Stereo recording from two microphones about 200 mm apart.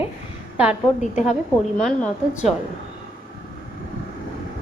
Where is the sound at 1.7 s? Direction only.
5° left (ahead or behind).